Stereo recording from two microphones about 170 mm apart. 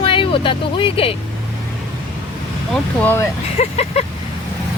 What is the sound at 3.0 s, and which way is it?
Speech, 10° left (ahead or behind).